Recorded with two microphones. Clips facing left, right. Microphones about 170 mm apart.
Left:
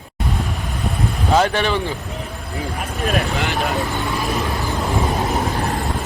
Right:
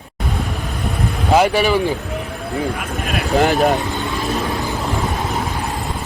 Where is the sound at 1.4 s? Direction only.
10° right (ahead or behind).